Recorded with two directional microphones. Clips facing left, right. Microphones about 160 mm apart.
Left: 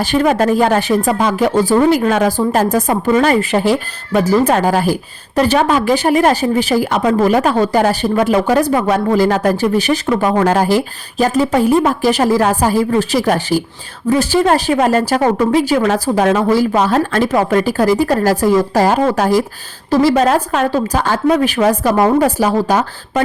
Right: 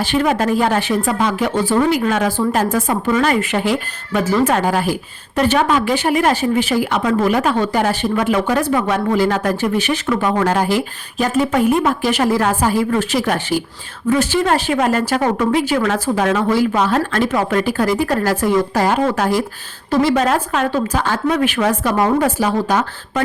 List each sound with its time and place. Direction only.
0.0 s speech: 40° left (ahead or behind)